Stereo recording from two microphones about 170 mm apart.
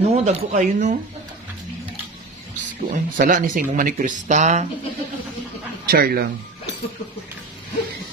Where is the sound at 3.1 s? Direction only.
50° right (ahead or behind).